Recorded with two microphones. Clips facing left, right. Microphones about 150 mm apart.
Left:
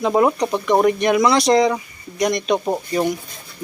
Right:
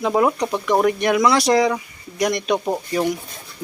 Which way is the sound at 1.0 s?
5° right (ahead or behind).